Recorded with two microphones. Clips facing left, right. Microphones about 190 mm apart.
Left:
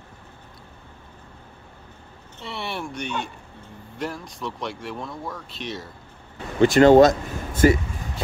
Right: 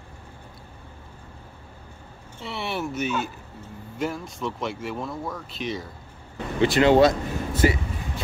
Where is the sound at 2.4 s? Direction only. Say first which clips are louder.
Right 2 dB; centre (ahead or behind).